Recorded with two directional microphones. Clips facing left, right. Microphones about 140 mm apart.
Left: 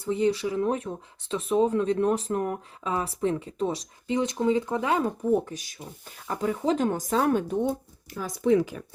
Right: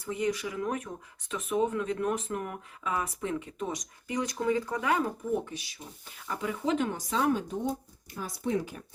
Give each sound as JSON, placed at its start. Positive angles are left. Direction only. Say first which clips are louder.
{"t": 0.0, "sound": "speech", "louder": "left 6 dB", "side_deg": 30}
{"t": 5.5, "sound": "speech", "louder": "left 3 dB", "side_deg": 45}
{"t": 8.2, "sound": "speech", "louder": "left 8 dB", "side_deg": 90}